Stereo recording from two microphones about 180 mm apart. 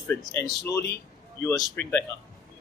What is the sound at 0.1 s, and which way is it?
Speech, 10° left (ahead or behind).